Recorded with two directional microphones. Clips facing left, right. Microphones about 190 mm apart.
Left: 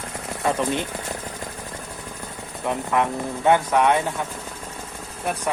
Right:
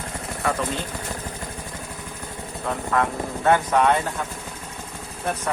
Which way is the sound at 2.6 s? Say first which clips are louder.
Left 1 dB; 15° left (ahead or behind).